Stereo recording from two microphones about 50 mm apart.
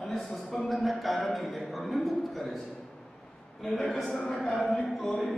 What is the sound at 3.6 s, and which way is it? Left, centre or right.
A man's voice, centre.